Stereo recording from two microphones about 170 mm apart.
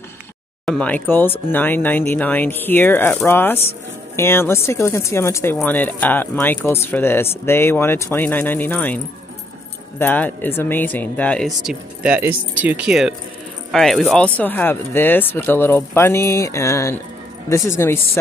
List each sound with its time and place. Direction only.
0.7 s speech: 5° left (ahead or behind)